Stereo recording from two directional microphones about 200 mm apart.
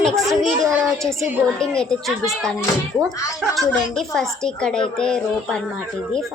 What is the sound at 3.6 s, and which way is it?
A woman's voice, 5° left (ahead or behind).